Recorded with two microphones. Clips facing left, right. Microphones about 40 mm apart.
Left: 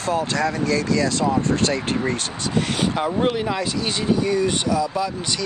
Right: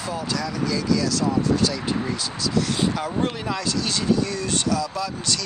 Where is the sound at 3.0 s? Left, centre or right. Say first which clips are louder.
Left 5 dB; left.